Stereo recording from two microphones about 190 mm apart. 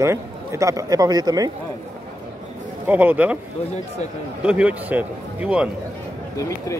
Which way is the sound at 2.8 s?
10° right (ahead or behind).